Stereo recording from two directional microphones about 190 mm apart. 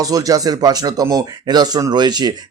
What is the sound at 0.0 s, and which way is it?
Speech, 20° right (ahead or behind).